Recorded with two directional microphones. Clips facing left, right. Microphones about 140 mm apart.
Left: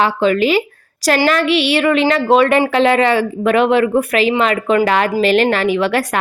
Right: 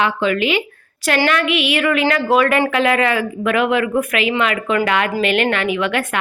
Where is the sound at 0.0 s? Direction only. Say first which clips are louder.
Left 4 dB; 35° left (ahead or behind).